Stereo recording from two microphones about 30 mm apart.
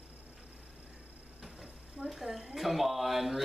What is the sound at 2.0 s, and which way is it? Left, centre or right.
Speech, centre.